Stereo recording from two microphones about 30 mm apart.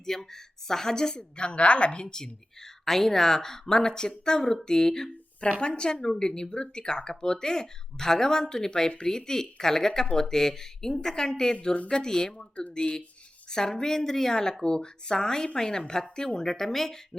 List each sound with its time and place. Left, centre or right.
0.0 s speech: centre
1.1 s a woman's voice: left
2.8 s speech: centre
4.9 s speech: centre
5.5 s speech: left
14.6 s speech: left; by 17.0 s centre